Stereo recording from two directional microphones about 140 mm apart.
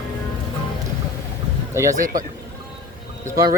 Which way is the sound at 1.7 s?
20° right (ahead or behind).